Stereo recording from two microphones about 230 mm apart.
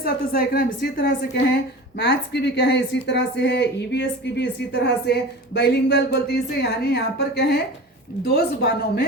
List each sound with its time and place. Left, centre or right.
0.0 s a woman's voice: left